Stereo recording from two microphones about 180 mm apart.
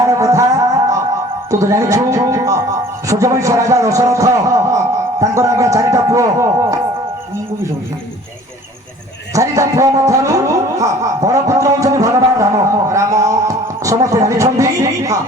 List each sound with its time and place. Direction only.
0.0 s music: 20° right (ahead or behind)
1.5 s a man's voice: 15° right (ahead or behind)
9.3 s music: 15° right (ahead or behind)